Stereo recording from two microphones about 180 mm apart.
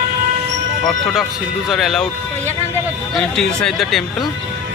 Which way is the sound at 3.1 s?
5° left (ahead or behind).